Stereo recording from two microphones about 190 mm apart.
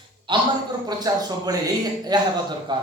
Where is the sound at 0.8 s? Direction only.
20° right (ahead or behind).